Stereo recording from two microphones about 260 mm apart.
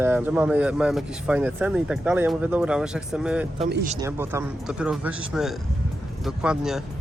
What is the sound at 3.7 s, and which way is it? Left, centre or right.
Speech, right.